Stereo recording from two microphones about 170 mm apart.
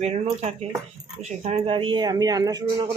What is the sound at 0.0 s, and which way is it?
Speech, 35° right (ahead or behind).